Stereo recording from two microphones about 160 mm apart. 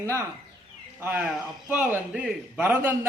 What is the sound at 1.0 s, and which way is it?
A man's voice, 10° right (ahead or behind).